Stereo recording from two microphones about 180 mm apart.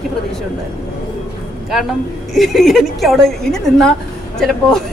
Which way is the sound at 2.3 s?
Centre (ahead or behind).